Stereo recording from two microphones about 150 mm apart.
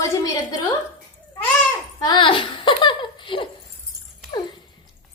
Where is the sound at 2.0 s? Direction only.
35° left (ahead or behind).